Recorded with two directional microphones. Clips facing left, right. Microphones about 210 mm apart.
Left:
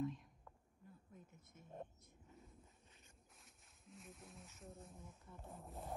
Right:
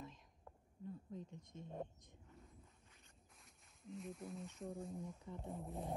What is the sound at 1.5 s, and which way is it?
Speech, 25° right (ahead or behind).